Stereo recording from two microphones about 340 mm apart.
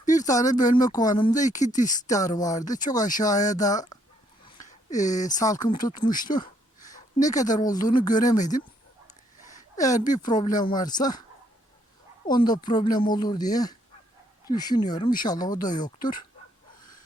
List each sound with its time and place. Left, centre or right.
0.0 s a sound: left
0.3 s speech: centre
1.4 s speech: left
2.0 s speech: centre
4.4 s a sound: left
5.2 s speech: centre
9.4 s a sound: left
9.7 s speech: centre
12.3 s speech: centre